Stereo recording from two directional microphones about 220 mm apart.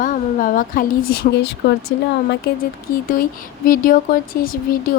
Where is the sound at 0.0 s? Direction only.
40° left (ahead or behind).